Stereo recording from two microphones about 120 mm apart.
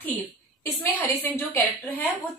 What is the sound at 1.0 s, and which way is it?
A woman's voice, 20° left (ahead or behind).